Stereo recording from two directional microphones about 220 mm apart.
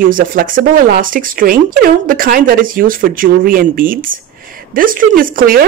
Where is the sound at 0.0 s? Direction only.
40° right (ahead or behind).